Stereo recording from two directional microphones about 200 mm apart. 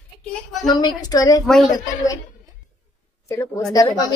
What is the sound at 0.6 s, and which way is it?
A woman's voice, 20° left (ahead or behind).